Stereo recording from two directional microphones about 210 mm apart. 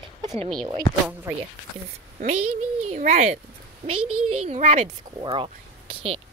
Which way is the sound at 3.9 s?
90° right.